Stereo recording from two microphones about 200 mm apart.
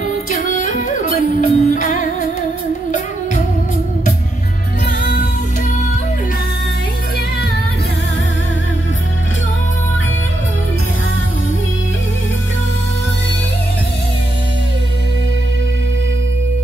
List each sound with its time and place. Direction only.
0.6 s music: 40° left (ahead or behind)